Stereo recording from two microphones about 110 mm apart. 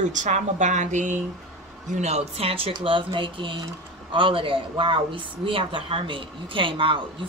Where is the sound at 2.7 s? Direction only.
45° right (ahead or behind).